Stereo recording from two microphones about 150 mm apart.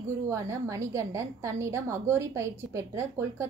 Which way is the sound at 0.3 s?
20° right (ahead or behind).